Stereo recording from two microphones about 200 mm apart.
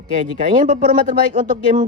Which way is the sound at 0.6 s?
40° right (ahead or behind).